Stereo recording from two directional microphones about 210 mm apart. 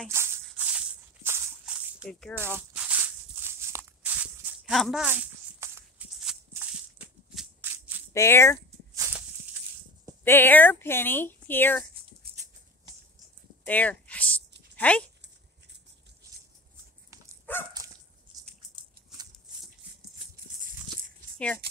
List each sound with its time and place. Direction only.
0.1 s a sound: 10° right (ahead or behind)
2.7 s walk: 5° right (ahead or behind)
8.1 s a woman's voice: 15° left (ahead or behind)
8.9 s walk: 10° right (ahead or behind)
10.2 s a woman's voice: 10° left (ahead or behind)
13.7 s a sound: 5° left (ahead or behind)
14.8 s speech: 5° left (ahead or behind)
17.5 s dog: 10° left (ahead or behind)